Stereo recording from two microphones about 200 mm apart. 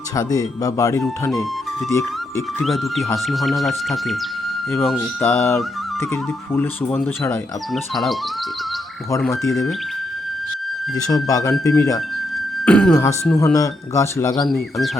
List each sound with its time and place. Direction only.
0.2 s speech: 15° left (ahead or behind)
2.6 s speech: centre (ahead or behind)
5.2 s speech: 10° left (ahead or behind)
10.9 s speech: 20° left (ahead or behind)
12.6 s speech: 5° left (ahead or behind)
13.3 s speech: 15° left (ahead or behind)